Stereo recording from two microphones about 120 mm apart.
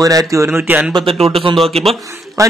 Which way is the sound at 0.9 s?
50° right (ahead or behind).